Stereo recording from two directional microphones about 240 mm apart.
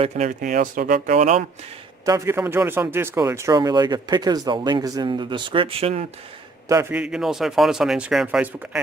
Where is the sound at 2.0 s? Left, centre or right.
Centre.